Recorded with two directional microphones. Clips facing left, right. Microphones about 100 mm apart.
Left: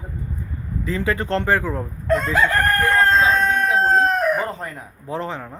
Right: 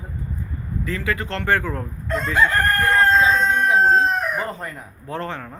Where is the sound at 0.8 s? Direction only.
20° left (ahead or behind).